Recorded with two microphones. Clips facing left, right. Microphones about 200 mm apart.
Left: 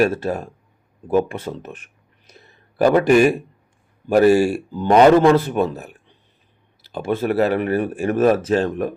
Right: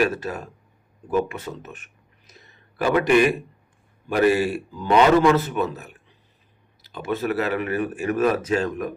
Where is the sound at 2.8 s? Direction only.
40° left (ahead or behind).